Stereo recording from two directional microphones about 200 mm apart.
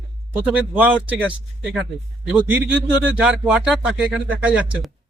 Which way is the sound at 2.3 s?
10° right (ahead or behind).